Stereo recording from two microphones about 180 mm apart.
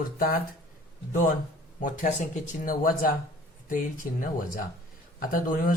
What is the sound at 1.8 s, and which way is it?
Speech, 45° left (ahead or behind).